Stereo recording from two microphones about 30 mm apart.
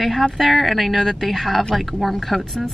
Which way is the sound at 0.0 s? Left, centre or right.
Centre.